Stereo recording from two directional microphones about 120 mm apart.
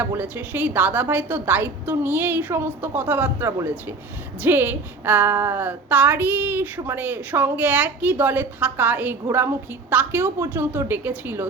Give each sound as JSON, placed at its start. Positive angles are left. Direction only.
{"t": 0.0, "sound": "a woman's voice", "side_deg": -15}